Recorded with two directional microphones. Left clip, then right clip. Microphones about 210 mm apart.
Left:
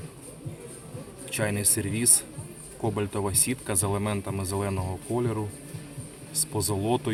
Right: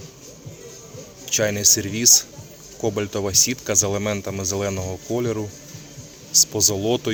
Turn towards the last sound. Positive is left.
turn(degrees=-25)  # may be behind; listen again after turning